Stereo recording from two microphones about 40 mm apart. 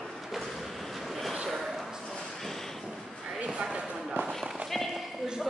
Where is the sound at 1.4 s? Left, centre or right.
Centre.